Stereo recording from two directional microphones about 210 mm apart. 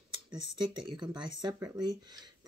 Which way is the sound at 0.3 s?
20° right (ahead or behind).